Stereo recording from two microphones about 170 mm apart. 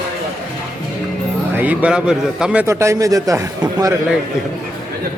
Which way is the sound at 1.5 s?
10° right (ahead or behind).